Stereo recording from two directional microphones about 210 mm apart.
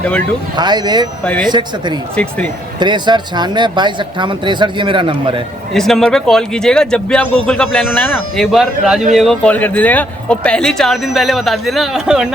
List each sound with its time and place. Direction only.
0.5 s speech: 20° right (ahead or behind)
1.2 s a man's voice: 5° left (ahead or behind)
1.5 s speech: 20° right (ahead or behind)
5.7 s a man's voice: centre (ahead or behind)